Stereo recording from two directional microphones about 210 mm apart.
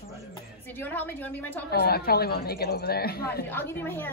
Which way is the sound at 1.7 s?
45° left (ahead or behind).